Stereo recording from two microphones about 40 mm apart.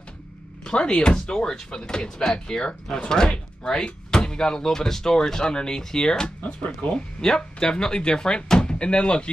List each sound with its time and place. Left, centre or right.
0.7 s speech: left
6.4 s speech: left
7.2 s speech: centre